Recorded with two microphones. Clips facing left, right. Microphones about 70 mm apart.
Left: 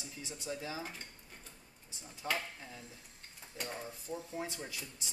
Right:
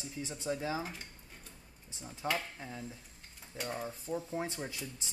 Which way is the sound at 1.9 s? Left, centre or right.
Right.